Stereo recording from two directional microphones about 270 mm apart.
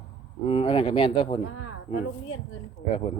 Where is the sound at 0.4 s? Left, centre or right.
Centre.